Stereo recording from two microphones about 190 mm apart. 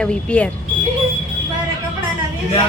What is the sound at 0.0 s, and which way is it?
Speech, 5° left (ahead or behind).